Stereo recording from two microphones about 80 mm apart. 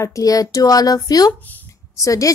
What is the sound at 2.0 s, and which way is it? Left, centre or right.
Speech, left.